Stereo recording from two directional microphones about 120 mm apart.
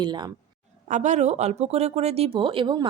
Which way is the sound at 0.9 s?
85° right.